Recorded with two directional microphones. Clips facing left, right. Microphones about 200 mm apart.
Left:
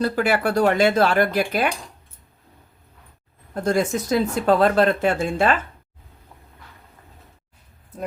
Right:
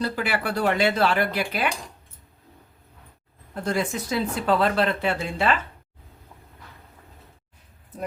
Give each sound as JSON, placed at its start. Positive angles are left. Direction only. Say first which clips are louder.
{"t": 0.0, "sound": "speech", "louder": "left 6 dB", "side_deg": 45}
{"t": 3.5, "sound": "speech", "louder": "left 5 dB", "side_deg": 45}